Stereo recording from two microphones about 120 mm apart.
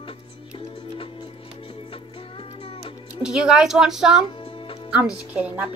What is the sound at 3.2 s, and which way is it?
A woman's voice, 5° right (ahead or behind).